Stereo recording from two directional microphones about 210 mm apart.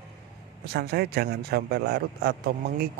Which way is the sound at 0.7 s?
50° right (ahead or behind).